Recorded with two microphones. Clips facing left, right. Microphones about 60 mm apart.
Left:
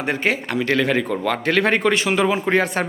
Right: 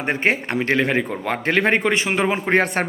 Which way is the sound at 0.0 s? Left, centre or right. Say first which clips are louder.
Right 1 dB; right.